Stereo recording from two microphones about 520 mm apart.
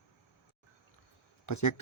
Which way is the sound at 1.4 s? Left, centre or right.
Left.